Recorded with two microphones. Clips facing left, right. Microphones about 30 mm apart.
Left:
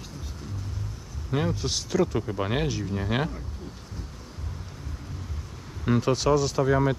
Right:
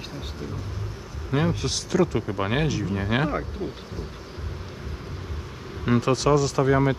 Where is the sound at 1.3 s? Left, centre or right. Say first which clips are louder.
Right 3 dB; right.